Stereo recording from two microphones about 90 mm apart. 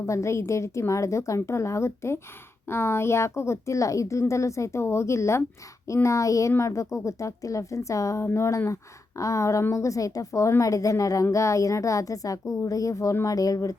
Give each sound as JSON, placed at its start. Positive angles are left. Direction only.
{"t": 0.0, "sound": "a woman's voice", "side_deg": 35}